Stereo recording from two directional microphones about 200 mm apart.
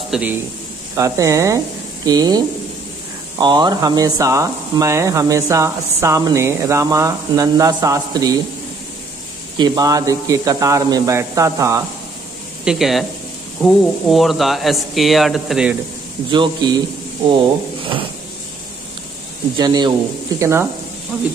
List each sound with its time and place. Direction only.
0.1 s a man's voice: 5° right (ahead or behind)
9.6 s speech: 20° right (ahead or behind)
12.6 s speech: centre (ahead or behind)
16.3 s a man's voice: 20° right (ahead or behind)
19.5 s a man's voice: 20° right (ahead or behind)